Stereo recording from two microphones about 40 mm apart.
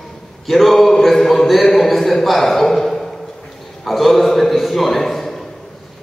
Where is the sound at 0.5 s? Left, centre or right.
Centre.